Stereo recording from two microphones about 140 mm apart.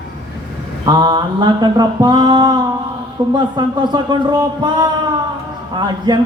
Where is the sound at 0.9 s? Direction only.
30° right (ahead or behind).